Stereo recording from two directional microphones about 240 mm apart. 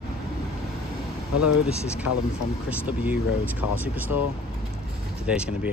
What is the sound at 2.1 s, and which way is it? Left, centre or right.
Speech, left.